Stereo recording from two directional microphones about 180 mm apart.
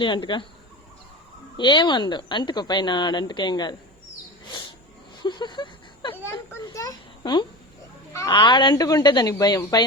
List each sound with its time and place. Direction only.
0.0 s speech: 25° left (ahead or behind)
1.5 s speech: 25° left (ahead or behind)
5.2 s a sound: 25° left (ahead or behind)
8.3 s speech: 25° left (ahead or behind)